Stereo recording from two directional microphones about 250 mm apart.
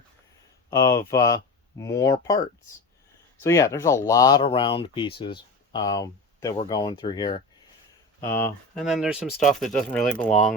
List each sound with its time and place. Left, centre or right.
0.7 s speech: centre
3.4 s speech: centre